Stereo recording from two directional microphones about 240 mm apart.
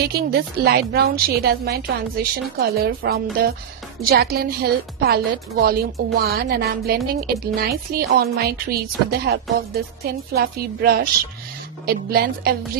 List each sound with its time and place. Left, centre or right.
0.0 s speech: right